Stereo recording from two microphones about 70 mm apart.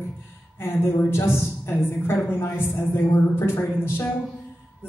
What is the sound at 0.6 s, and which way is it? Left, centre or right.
Speech, left.